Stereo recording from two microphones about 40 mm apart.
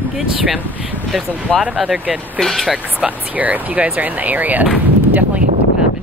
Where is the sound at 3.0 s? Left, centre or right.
Right.